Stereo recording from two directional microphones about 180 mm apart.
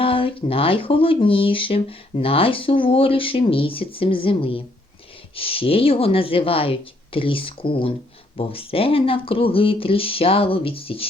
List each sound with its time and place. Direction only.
0.0 s speech: 30° left (ahead or behind)